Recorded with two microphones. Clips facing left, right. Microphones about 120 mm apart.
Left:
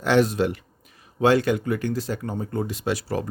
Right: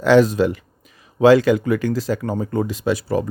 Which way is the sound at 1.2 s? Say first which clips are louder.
Right 7 dB; 90° right.